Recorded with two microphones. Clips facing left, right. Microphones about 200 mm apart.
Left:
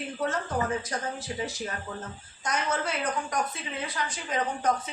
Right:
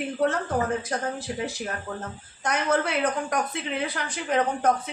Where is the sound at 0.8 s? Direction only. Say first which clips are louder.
Right 4 dB; 60° right (ahead or behind).